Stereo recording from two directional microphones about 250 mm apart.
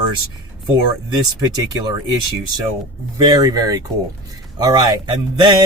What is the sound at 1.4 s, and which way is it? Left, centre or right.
Speech, centre.